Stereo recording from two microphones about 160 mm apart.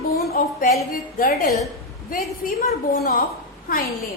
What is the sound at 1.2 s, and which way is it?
A woman's voice, 65° left (ahead or behind).